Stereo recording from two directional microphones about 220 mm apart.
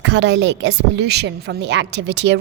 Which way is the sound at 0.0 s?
55° right (ahead or behind).